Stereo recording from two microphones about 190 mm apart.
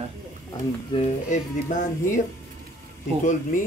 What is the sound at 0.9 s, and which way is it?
Speech, 25° left (ahead or behind).